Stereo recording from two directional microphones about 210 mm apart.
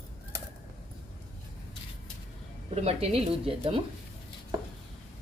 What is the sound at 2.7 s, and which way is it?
Speech, 30° right (ahead or behind).